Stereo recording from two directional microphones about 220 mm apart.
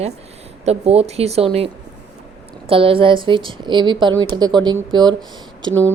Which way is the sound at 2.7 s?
25° right (ahead or behind).